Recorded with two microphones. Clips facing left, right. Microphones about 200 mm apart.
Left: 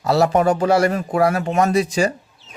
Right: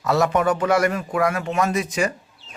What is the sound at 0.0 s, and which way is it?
Speech, 30° left (ahead or behind).